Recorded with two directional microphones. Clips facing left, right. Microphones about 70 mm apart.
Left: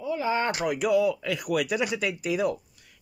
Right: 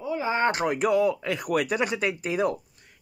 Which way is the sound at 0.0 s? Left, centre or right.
Right.